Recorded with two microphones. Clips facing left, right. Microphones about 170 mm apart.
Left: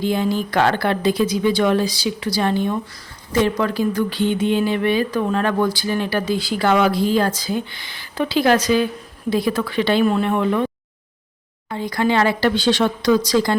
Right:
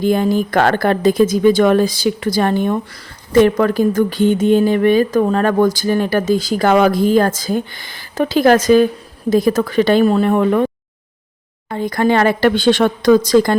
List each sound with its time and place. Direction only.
0.0 s speech: 50° right (ahead or behind)
11.7 s speech: 50° right (ahead or behind)